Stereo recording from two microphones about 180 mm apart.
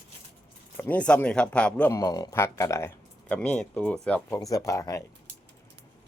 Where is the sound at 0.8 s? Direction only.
10° left (ahead or behind).